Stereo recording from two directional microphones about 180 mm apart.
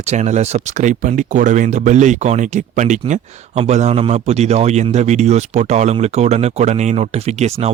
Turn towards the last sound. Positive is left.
turn(degrees=-35)  # may be behind; listen again after turning